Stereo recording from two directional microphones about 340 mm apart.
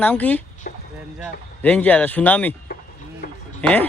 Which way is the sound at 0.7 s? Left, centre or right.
Left.